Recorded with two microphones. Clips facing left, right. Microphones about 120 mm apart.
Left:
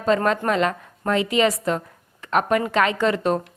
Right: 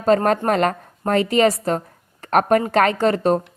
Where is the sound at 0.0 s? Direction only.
45° right (ahead or behind).